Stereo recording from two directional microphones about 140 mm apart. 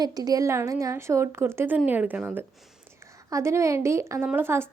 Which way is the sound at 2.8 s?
20° right (ahead or behind).